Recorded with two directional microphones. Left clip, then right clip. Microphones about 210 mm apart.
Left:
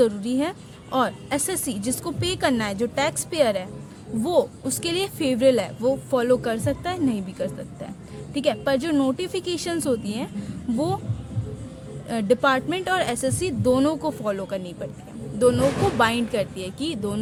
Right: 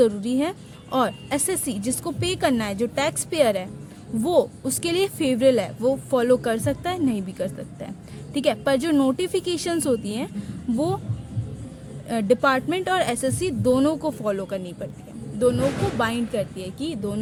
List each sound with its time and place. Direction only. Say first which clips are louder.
0.0 s speech: right 1 dB; 15° right (ahead or behind)
12.0 s speech: even; 15° right (ahead or behind)